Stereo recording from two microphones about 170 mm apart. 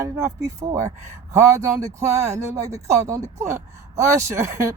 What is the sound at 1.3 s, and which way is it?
Speech, 15° right (ahead or behind).